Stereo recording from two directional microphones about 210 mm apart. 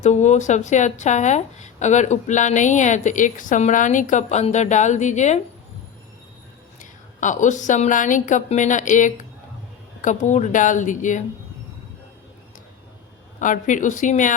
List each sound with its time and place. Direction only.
0.0 s a woman's voice: 35° left (ahead or behind)
6.7 s a woman's voice: 35° left (ahead or behind)
13.4 s a woman's voice: 40° left (ahead or behind)